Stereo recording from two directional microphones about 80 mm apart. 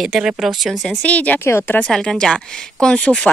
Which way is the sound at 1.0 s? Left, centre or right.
Centre.